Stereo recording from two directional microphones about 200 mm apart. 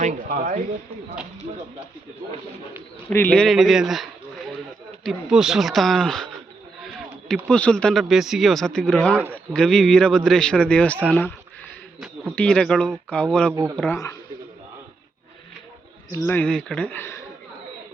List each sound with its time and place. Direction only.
0.0 s speech: 40° right (ahead or behind)
3.1 s a man's voice: 10° left (ahead or behind)
7.5 s a man's voice: 5° left (ahead or behind)
13.5 s speech: 15° right (ahead or behind)
13.7 s speech: 10° left (ahead or behind)
16.1 s speech: 10° left (ahead or behind)